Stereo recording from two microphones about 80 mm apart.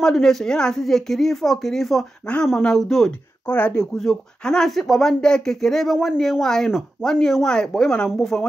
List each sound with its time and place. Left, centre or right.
0.0 s speech: centre
3.4 s speech: centre